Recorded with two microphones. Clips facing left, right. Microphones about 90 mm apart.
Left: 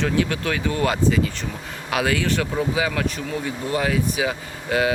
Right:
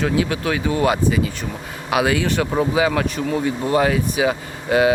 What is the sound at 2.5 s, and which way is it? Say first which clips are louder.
Speech: right 5 dB; 40° right (ahead or behind).